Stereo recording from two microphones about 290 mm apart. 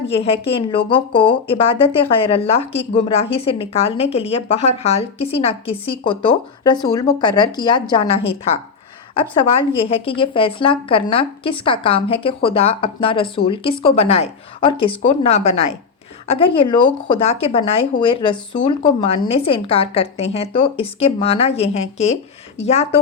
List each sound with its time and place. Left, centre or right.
0.1 s speech: centre